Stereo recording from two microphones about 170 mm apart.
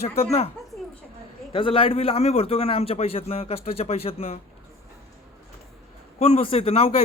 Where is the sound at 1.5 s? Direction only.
30° left (ahead or behind).